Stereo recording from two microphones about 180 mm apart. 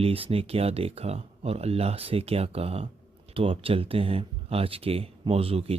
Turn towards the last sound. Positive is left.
turn(degrees=-35)  # may be behind; listen again after turning